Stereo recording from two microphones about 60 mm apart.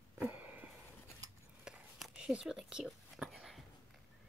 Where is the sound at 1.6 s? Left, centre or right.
Centre.